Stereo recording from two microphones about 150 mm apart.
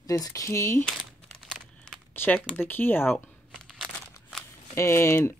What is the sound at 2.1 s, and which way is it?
Speech, 15° left (ahead or behind).